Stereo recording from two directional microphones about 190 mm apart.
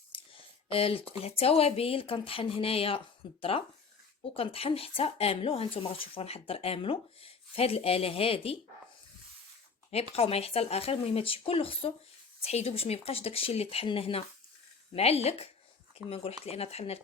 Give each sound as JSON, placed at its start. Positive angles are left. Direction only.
{"t": 0.1, "sound": "a sound", "side_deg": 25}
{"t": 0.7, "sound": "speech", "side_deg": 30}
{"t": 10.2, "sound": "speech", "side_deg": 30}